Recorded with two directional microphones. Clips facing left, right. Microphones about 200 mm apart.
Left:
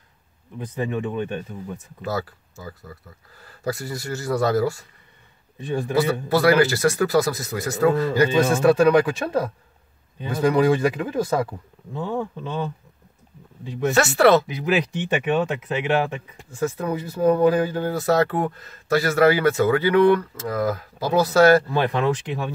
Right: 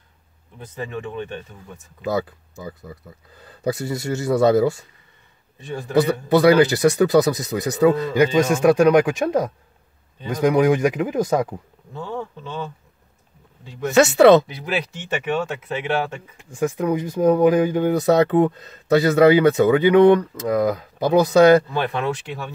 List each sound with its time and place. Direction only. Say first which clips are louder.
0.6 s speech: left 4 dB; 15° left (ahead or behind)
2.0 s speech: right 4 dB; 20° right (ahead or behind)
5.7 s speech: left 4 dB; 15° left (ahead or behind)
6.2 s speech: right 4 dB; 20° right (ahead or behind)
11.9 s speech: left 3 dB; 15° left (ahead or behind)
13.9 s speech: right 5 dB; 20° right (ahead or behind)
14.8 s speech: left 3 dB; 15° left (ahead or behind)
16.4 s speech: right 4 dB; 15° right (ahead or behind)
21.7 s speech: left 2 dB; 15° left (ahead or behind)